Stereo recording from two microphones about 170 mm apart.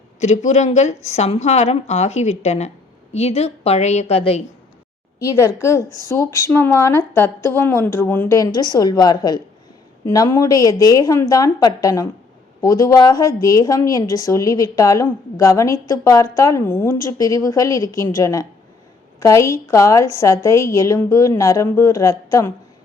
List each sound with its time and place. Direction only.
0.2 s a woman's voice: 40° left (ahead or behind)
5.2 s a woman's voice: 20° left (ahead or behind)